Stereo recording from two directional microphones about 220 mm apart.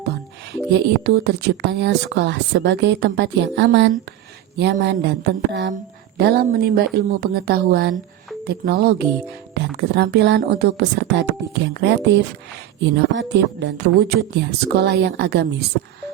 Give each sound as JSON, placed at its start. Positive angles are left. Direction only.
{"t": 0.7, "sound": "speech", "side_deg": -45}